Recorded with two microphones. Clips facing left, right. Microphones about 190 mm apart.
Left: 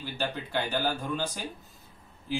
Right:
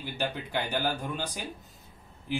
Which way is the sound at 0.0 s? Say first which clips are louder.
Even; 15° right (ahead or behind).